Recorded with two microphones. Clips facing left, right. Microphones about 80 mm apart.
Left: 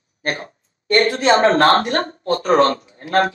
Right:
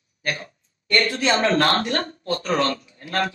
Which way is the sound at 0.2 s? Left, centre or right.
Left.